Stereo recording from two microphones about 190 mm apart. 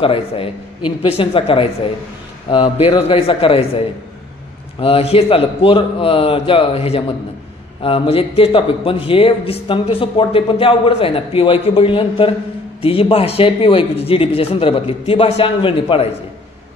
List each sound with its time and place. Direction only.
0.0 s a man's voice: 30° left (ahead or behind)